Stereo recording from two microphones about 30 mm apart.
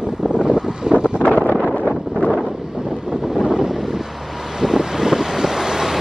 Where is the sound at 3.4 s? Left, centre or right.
Centre.